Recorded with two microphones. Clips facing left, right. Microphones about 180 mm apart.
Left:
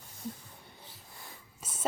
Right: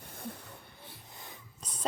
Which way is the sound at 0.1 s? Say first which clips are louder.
Left 1 dB; 60° right (ahead or behind).